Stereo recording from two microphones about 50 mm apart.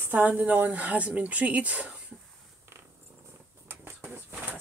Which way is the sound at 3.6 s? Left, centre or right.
Right.